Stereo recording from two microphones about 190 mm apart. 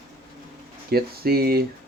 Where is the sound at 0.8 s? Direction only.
55° right (ahead or behind).